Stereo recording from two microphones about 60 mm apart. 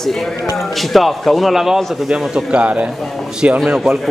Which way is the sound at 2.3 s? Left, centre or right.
Right.